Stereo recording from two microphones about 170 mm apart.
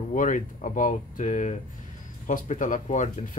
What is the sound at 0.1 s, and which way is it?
Speech, 50° left (ahead or behind).